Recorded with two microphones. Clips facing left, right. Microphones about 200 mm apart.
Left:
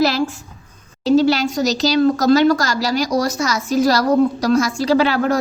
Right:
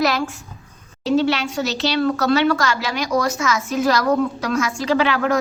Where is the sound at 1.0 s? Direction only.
35° left (ahead or behind).